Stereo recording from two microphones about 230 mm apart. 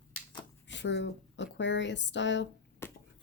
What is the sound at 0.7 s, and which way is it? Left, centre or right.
Speech, left.